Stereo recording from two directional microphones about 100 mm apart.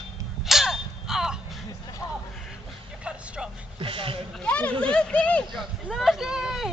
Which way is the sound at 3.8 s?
65° right (ahead or behind).